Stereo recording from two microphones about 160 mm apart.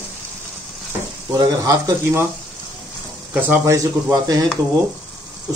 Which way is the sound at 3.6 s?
20° right (ahead or behind).